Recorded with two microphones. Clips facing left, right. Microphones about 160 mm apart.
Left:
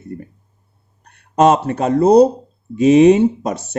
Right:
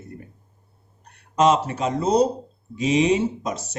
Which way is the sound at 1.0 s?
60° left (ahead or behind).